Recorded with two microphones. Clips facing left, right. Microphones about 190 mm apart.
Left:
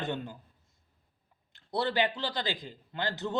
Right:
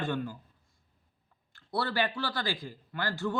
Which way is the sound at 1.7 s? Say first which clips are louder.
Left 2 dB; 20° left (ahead or behind).